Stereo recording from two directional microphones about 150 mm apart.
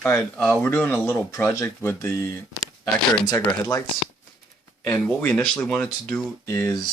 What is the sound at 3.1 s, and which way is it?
Speech, 30° left (ahead or behind).